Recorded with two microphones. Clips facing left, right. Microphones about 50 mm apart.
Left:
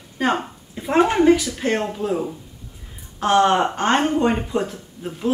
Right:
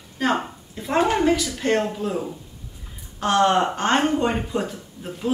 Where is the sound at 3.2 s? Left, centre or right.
Centre.